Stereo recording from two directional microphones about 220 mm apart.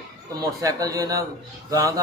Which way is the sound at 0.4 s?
15° right (ahead or behind).